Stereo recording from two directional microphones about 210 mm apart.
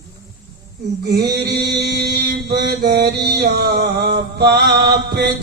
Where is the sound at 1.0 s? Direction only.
50° right (ahead or behind).